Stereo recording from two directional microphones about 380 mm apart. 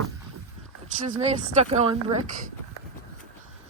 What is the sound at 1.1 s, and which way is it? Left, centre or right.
Speech, centre.